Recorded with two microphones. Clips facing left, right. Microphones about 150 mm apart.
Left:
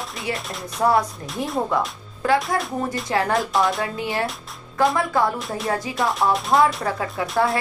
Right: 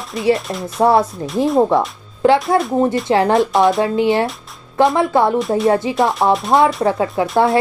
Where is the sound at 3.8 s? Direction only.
25° right (ahead or behind).